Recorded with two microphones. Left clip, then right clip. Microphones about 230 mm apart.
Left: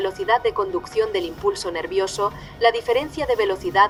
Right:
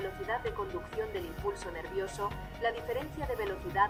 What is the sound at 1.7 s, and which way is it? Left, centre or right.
A woman's voice, left.